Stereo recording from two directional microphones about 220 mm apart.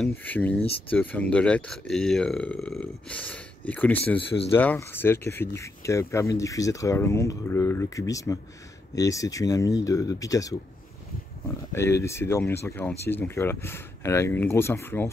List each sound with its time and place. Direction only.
0.0 s speech: 10° left (ahead or behind)